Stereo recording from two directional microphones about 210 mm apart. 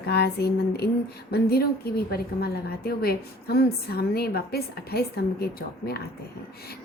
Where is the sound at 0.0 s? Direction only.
50° left (ahead or behind).